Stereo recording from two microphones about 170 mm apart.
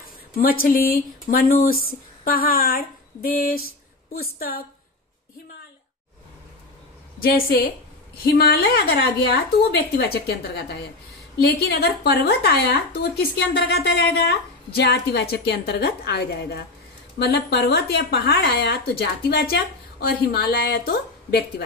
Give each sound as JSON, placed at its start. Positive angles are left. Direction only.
{"t": 0.4, "sound": "speech", "side_deg": 60}
{"t": 7.2, "sound": "speech", "side_deg": 65}
{"t": 11.3, "sound": "speech", "side_deg": 65}